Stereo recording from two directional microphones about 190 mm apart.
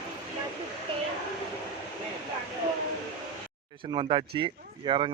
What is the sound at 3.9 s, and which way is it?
Speech, 25° right (ahead or behind).